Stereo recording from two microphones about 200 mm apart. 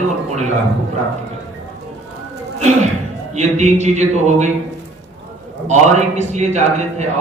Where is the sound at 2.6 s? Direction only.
35° right (ahead or behind).